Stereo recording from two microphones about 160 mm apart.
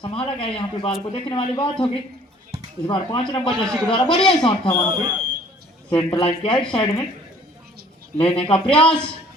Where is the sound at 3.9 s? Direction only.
30° left (ahead or behind).